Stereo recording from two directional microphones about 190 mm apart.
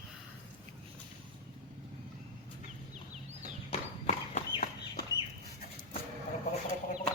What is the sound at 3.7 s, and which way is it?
Horse, 30° left (ahead or behind).